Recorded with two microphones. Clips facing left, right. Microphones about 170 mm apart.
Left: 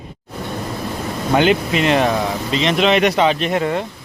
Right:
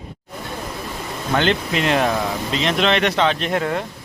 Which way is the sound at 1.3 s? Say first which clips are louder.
Left 4 dB; 5° left (ahead or behind).